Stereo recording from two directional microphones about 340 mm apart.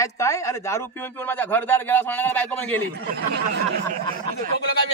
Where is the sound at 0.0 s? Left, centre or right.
Centre.